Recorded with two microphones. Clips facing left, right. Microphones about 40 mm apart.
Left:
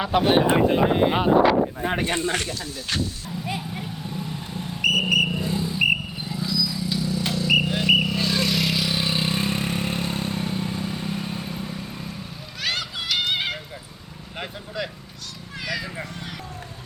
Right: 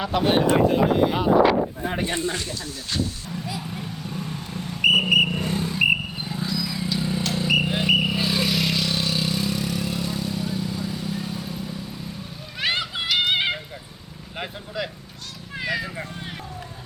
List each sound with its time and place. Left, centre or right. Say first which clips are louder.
0.0 s speech: left 1 dB; centre; by 2.3 s left
2.9 s speech: even; left
3.4 s vehicle: left 3 dB; left
4.8 s vehicle: right 3 dB; centre
5.3 s vehicle: even; right
6.2 s vehicle: left 4 dB; right
7.6 s a sound: left 1 dB; centre
8.0 s vehicle: even; centre
9.0 s vehicle: left 1 dB; left
12.5 s a sound: right 3 dB; right
13.1 s music: right 3 dB; right
14.3 s vehicle: right 1 dB; centre
15.5 s a sound: right 3 dB; right